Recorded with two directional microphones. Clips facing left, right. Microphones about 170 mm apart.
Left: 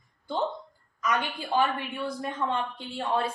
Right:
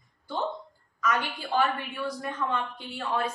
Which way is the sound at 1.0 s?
15° left (ahead or behind).